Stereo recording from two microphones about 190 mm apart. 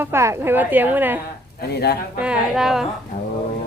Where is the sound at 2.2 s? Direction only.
5° right (ahead or behind).